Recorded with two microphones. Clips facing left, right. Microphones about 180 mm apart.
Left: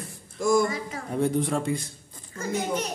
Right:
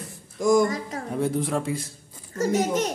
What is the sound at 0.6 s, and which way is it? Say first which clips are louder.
Speech: right 2 dB; 40° right (ahead or behind).